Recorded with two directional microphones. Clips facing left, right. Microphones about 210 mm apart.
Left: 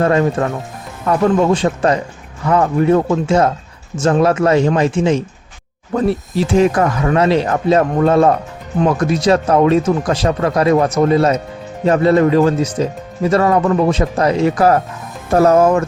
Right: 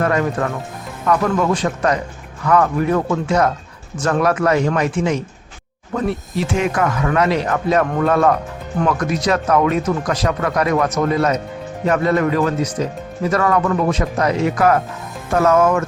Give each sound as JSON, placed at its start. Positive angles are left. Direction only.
{"t": 0.0, "sound": "speech", "side_deg": 25}